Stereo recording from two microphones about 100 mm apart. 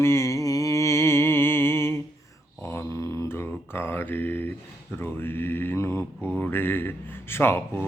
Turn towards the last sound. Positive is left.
turn(degrees=25)  # may be behind; listen again after turning